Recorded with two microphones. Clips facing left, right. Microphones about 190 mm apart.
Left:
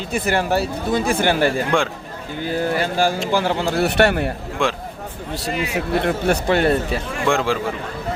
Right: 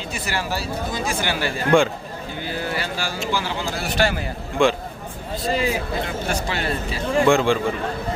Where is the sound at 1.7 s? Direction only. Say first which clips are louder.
Right 8 dB; centre (ahead or behind).